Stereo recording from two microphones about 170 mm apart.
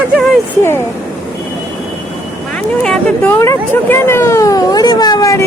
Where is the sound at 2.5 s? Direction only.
5° left (ahead or behind).